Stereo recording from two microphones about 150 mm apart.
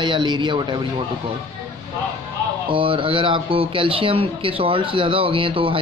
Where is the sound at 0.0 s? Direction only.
30° right (ahead or behind).